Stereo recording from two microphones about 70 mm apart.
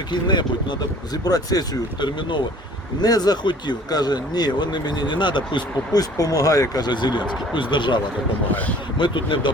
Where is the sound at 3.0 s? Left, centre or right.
Left.